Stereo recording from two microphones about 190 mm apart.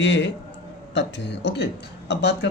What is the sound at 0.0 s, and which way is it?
Speech, 70° left (ahead or behind).